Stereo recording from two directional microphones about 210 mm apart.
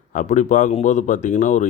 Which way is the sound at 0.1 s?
35° left (ahead or behind).